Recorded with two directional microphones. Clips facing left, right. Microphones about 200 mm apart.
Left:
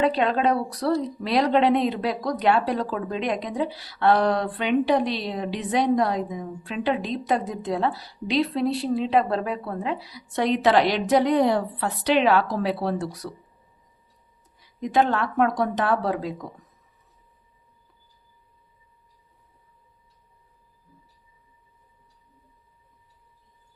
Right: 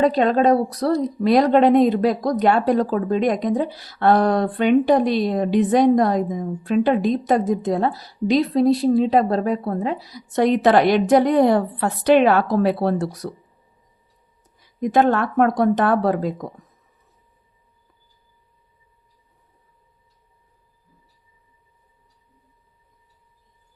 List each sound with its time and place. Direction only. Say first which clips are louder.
0.0 s speech: right 5 dB; 40° right (ahead or behind)
14.8 s speech: right 5 dB; 50° right (ahead or behind)